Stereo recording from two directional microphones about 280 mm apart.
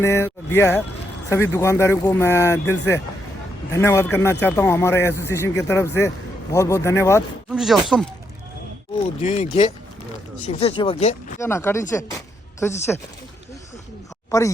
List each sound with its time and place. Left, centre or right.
0.0 s speech: centre
7.5 s speech: centre
9.2 s speech: left
11.3 s speech: centre
14.3 s speech: centre